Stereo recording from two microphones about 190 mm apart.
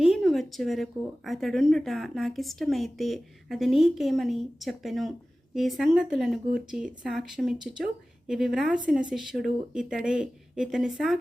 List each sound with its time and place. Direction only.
0.0 s speech: centre (ahead or behind)